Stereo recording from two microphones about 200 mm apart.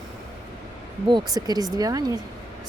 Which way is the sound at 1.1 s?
20° right (ahead or behind).